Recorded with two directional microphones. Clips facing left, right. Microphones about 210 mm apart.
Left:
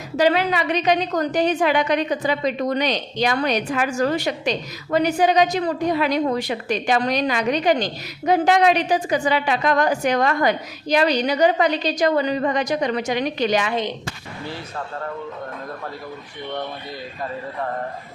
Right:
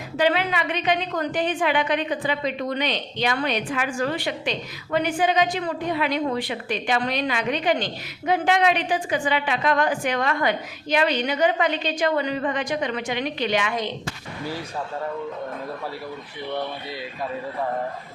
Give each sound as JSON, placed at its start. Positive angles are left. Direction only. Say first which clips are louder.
{"t": 0.2, "sound": "a woman's voice", "louder": "left 4 dB", "side_deg": 40}